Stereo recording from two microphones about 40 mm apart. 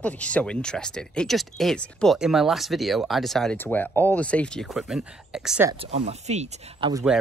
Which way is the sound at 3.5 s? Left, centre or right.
Left.